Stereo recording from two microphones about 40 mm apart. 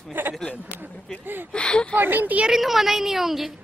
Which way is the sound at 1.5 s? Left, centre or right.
Left.